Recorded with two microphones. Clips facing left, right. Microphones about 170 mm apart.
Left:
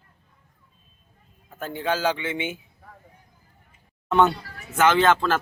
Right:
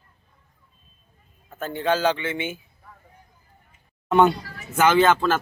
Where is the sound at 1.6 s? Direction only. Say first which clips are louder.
Right 3 dB; 10° left (ahead or behind).